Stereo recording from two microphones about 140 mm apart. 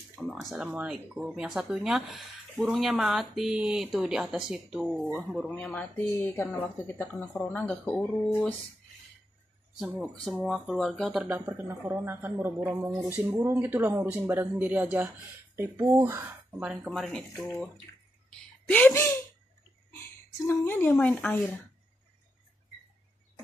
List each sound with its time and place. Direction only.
0.3 s speech: centre (ahead or behind)
5.5 s speech: 10° left (ahead or behind)
9.8 s speech: 15° right (ahead or behind)
11.2 s speech: 15° right (ahead or behind)
16.8 s speech: centre (ahead or behind)
17.9 s a sound: 25° left (ahead or behind)
18.7 s speech: 10° left (ahead or behind)
20.4 s speech: 15° left (ahead or behind)